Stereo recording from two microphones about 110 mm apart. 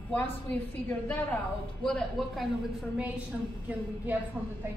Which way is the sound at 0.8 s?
15° left (ahead or behind).